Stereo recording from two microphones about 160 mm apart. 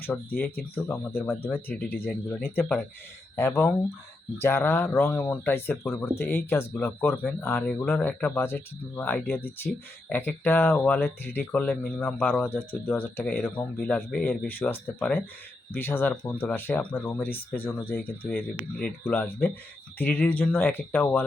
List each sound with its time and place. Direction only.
0.1 s speech: 10° left (ahead or behind)
3.3 s speech: 15° left (ahead or behind)